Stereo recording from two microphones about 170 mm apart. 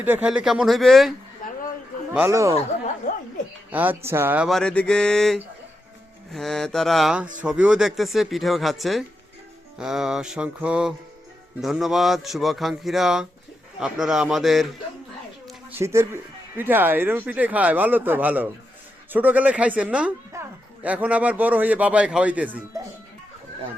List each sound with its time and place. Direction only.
0.0 s speech: 10° right (ahead or behind)
2.1 s speech: 15° right (ahead or behind)
3.1 s a sound: 45° left (ahead or behind)
3.7 s speech: 10° right (ahead or behind)
4.4 s speech: 5° left (ahead or behind)
15.7 s speech: 15° right (ahead or behind)